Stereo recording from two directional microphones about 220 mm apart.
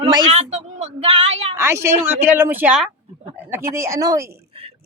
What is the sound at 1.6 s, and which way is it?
A woman's voice, 10° right (ahead or behind).